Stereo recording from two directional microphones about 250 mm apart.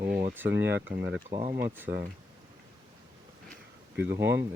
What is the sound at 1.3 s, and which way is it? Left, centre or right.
Speech, right.